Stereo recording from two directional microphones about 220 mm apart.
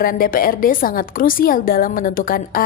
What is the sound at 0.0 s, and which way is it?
A woman's voice, 40° left (ahead or behind).